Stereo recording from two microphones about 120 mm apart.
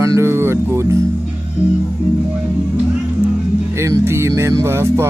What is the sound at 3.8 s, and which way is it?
Speech, 25° right (ahead or behind).